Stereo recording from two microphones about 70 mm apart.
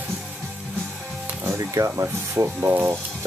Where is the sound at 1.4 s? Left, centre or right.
Right.